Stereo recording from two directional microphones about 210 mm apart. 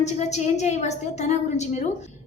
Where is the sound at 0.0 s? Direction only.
35° left (ahead or behind).